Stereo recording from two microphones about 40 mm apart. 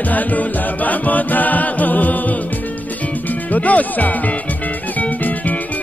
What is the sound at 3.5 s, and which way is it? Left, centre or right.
Music, left.